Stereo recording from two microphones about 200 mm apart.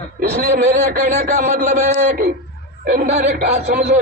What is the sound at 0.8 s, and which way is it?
A man's voice, 40° right (ahead or behind).